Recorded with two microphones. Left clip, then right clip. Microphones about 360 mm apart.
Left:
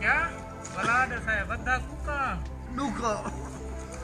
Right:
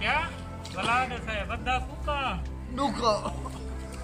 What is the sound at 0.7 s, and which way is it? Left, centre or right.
Speech, centre.